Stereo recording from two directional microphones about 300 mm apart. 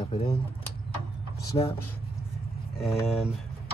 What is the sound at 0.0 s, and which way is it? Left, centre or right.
Speech, centre.